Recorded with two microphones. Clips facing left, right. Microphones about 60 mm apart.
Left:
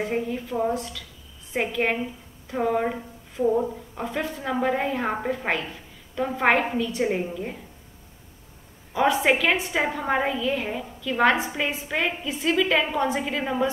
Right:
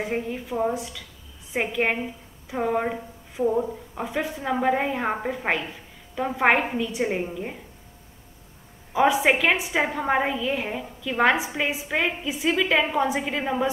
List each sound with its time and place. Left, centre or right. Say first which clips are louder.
0.0 s a woman's voice: left 1 dB; centre
8.9 s a woman's voice: right 1 dB; centre